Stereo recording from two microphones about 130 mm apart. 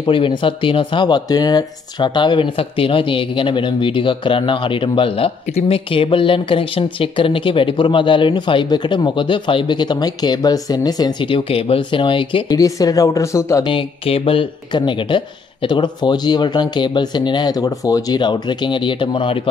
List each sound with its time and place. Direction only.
0.0 s speech: 40° left (ahead or behind)
12.5 s speech: 25° left (ahead or behind)
13.7 s speech: 45° left (ahead or behind)